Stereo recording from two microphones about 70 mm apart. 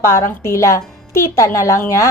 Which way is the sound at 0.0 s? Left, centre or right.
Left.